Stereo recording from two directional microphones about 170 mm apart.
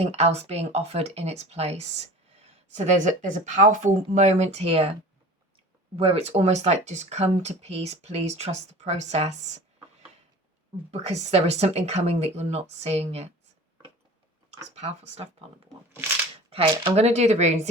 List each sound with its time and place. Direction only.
0.0 s speech: 40° right (ahead or behind)
6.0 s speech: 35° right (ahead or behind)
10.9 s speech: 40° right (ahead or behind)
14.8 s speech: 40° right (ahead or behind)
16.5 s speech: 35° right (ahead or behind)